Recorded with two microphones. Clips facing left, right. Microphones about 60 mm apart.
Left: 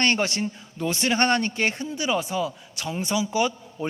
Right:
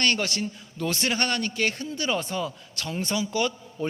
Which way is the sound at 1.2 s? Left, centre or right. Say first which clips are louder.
Left 7 dB; left.